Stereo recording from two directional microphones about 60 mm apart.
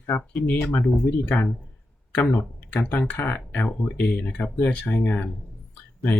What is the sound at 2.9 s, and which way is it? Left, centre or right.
Speech, left.